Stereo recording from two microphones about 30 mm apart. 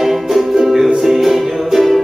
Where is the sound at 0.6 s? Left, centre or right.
Centre.